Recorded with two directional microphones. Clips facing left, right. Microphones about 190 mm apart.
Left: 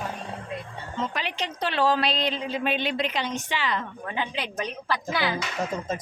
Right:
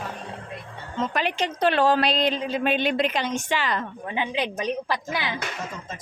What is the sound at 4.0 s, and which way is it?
A woman's voice, 20° right (ahead or behind).